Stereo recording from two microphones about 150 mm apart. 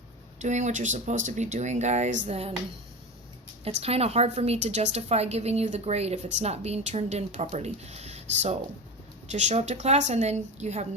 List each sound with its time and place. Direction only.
0.4 s a woman's voice: 50° right (ahead or behind)
3.6 s a woman's voice: 45° right (ahead or behind)